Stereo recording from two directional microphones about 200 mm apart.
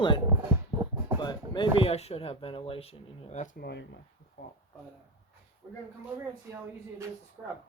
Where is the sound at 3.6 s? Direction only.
55° left (ahead or behind).